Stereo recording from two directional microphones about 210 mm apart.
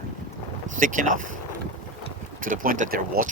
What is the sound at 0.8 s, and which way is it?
Speech, 40° right (ahead or behind).